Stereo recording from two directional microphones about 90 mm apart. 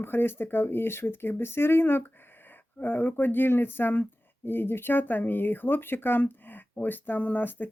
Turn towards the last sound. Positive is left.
turn(degrees=20)  # may be behind; listen again after turning